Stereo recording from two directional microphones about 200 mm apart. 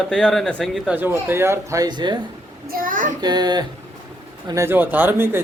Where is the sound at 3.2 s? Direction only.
20° right (ahead or behind).